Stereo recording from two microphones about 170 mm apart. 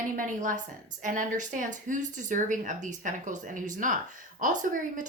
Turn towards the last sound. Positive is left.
turn(degrees=-50)  # may be behind; listen again after turning